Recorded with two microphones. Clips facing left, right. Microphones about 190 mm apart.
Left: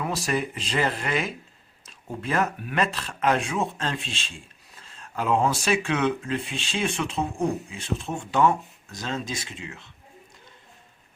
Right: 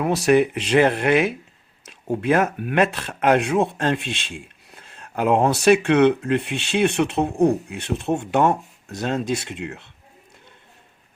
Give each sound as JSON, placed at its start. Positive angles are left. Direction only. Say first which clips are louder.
{"t": 0.0, "sound": "speech", "louder": "right 10 dB", "side_deg": -65}